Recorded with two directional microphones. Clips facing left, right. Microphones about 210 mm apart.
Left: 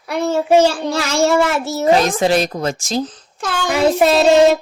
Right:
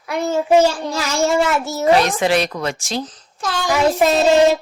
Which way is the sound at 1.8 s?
40° left (ahead or behind).